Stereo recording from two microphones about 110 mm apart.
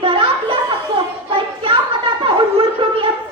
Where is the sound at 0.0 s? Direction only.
55° right (ahead or behind).